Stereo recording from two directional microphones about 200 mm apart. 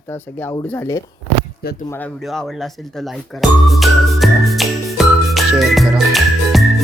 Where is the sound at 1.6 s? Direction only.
50° left (ahead or behind).